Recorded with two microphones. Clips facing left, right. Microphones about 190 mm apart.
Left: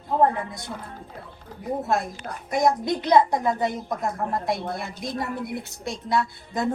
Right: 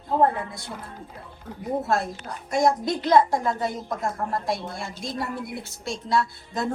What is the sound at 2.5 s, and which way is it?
A woman's voice, 20° left (ahead or behind).